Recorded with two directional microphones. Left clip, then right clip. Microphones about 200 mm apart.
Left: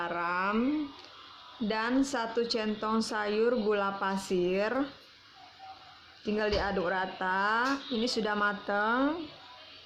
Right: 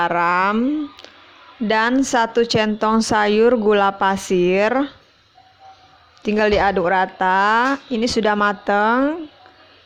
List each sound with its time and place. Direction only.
0.0 s a woman's voice: 45° right (ahead or behind)
1.6 s a woman's voice: 45° right (ahead or behind)
6.2 s a woman's voice: 40° right (ahead or behind)